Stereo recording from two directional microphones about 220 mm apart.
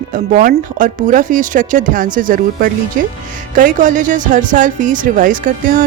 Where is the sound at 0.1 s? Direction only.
40° right (ahead or behind).